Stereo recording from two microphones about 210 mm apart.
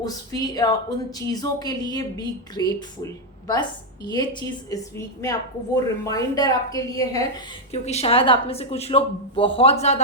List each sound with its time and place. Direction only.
0.0 s a woman's voice: 20° left (ahead or behind)
7.7 s a woman's voice: 30° left (ahead or behind)